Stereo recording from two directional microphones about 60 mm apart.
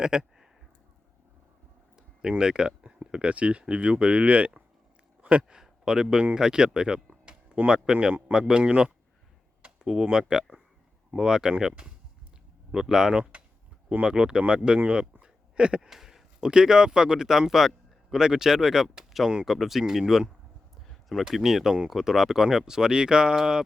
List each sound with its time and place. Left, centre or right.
0.0 s speech: centre
2.0 s speech: centre
12.7 s speech: centre
15.2 s a sound: centre
15.9 s speech: centre